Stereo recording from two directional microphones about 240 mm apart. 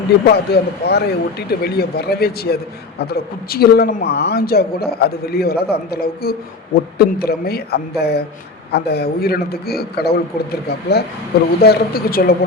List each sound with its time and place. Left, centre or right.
0.3 s speech: left